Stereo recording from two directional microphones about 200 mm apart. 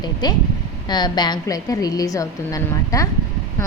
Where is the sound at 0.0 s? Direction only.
20° left (ahead or behind).